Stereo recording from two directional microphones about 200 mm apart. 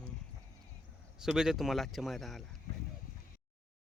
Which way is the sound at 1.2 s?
5° right (ahead or behind).